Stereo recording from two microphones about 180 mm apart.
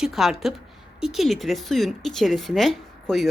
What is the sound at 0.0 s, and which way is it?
A woman's voice, centre (ahead or behind).